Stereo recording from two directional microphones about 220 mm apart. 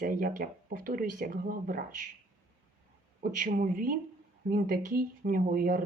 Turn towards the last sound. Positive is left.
turn(degrees=-40)  # may be behind; listen again after turning